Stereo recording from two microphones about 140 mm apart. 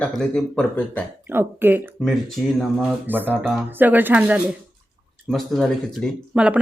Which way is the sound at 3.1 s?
15° right (ahead or behind).